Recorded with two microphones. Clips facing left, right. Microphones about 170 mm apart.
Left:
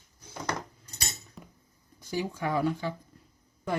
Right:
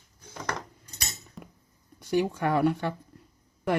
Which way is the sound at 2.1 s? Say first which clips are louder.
Right 5 dB; 65° right (ahead or behind).